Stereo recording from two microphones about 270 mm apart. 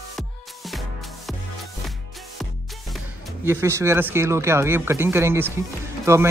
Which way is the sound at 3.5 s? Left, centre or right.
Centre.